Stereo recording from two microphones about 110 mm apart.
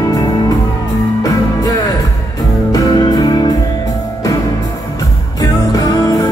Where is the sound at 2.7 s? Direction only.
35° left (ahead or behind).